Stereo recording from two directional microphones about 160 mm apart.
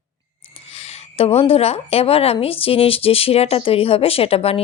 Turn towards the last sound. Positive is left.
turn(degrees=40)  # may be behind; listen again after turning